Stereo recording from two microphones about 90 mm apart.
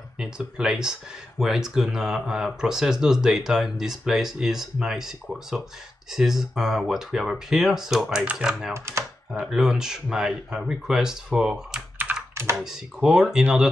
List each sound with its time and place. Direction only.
0.2 s speech: 10° right (ahead or behind)
8.7 s speech: 30° right (ahead or behind)
9.4 s speech: 5° right (ahead or behind)